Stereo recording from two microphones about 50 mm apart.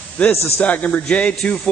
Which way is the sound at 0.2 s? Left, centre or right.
Left.